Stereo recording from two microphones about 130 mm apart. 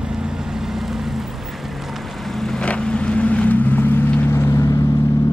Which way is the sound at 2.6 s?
10° left (ahead or behind).